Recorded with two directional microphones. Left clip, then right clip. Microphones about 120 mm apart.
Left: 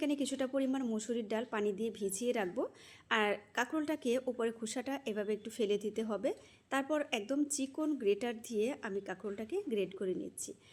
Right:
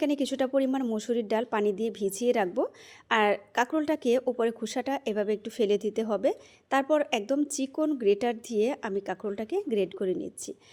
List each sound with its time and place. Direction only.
0.0 s a woman's voice: 35° right (ahead or behind)